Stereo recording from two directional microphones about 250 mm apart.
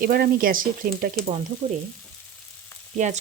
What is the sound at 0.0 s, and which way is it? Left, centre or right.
Speech, right.